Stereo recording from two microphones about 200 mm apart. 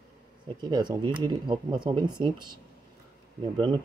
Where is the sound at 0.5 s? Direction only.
20° right (ahead or behind).